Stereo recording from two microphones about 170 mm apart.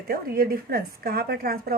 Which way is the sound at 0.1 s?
65° right (ahead or behind).